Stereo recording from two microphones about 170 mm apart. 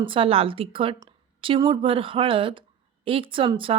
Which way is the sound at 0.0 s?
30° right (ahead or behind).